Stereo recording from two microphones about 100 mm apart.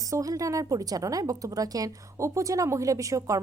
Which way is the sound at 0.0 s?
35° right (ahead or behind).